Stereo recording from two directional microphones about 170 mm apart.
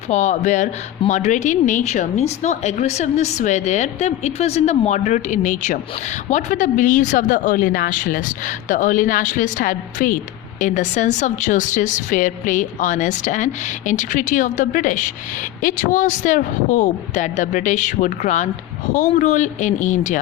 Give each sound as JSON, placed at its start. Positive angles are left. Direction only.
{"t": 0.1, "sound": "speech", "side_deg": 45}